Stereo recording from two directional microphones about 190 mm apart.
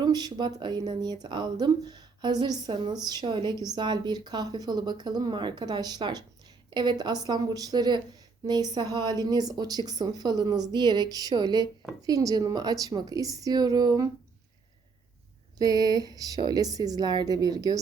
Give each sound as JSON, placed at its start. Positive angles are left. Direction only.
{"t": 0.0, "sound": "a woman's voice", "side_deg": -20}
{"t": 15.5, "sound": "a woman's voice", "side_deg": -20}